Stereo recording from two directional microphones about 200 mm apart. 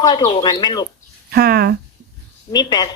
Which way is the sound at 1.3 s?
50° right (ahead or behind).